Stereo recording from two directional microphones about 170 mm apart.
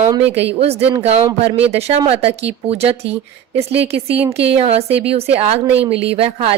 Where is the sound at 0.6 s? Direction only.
35° right (ahead or behind).